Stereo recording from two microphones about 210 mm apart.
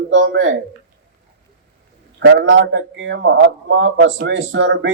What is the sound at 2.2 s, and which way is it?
A man's voice, 60° right (ahead or behind).